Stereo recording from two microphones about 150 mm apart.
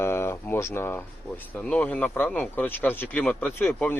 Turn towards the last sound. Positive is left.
turn(degrees=15)  # may be behind; listen again after turning